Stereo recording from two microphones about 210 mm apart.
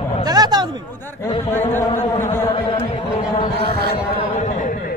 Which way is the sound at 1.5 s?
10° left (ahead or behind).